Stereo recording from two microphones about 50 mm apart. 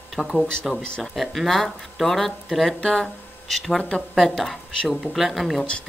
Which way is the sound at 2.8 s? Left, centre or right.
Centre.